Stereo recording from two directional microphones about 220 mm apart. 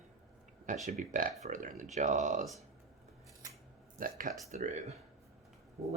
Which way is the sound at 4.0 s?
40° right (ahead or behind).